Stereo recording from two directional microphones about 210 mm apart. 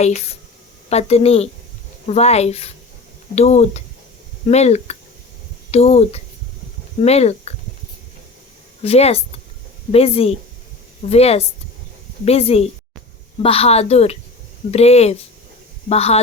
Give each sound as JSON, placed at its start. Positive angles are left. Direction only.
{"t": 0.0, "sound": "a woman's voice", "side_deg": 30}
{"t": 8.8, "sound": "a woman's voice", "side_deg": 30}